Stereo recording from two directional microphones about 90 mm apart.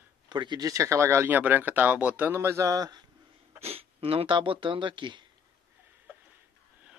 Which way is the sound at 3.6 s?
90° right.